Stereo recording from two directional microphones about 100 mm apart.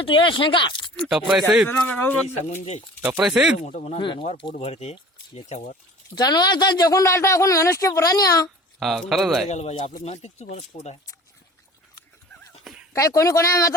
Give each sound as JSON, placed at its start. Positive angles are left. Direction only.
{"t": 0.0, "sound": "speech", "side_deg": 60}
{"t": 0.9, "sound": "speech", "side_deg": -5}
{"t": 1.6, "sound": "speech", "side_deg": 15}
{"t": 3.0, "sound": "speech", "side_deg": -5}
{"t": 3.8, "sound": "speech", "side_deg": 55}
{"t": 4.3, "sound": "speech", "side_deg": 70}
{"t": 6.1, "sound": "a woman's voice", "side_deg": 40}
{"t": 8.8, "sound": "speech", "side_deg": 0}
{"t": 9.6, "sound": "speech", "side_deg": 90}
{"t": 12.6, "sound": "a sound", "side_deg": -5}
{"t": 12.9, "sound": "a woman's voice", "side_deg": 30}